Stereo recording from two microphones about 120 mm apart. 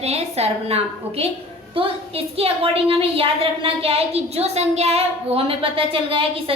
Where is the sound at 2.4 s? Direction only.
55° right (ahead or behind).